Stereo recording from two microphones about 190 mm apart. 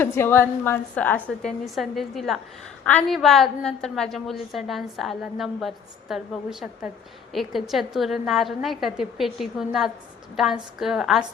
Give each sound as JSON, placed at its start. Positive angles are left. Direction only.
{"t": 0.0, "sound": "a woman's voice", "side_deg": 10}